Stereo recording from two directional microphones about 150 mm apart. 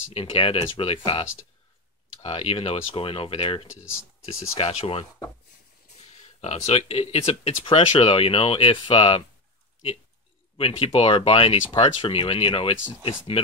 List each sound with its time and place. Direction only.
0.1 s speech: 40° left (ahead or behind)
2.2 s speech: 40° left (ahead or behind)
10.6 s speech: 40° left (ahead or behind)